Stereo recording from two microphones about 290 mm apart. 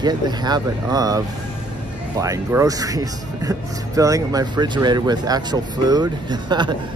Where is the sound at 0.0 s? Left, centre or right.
Centre.